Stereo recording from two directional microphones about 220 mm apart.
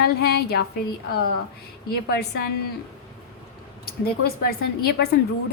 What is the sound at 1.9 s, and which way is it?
Speech, 45° left (ahead or behind).